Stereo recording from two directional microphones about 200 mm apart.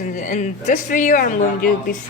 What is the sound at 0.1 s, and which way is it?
Speech, 40° left (ahead or behind).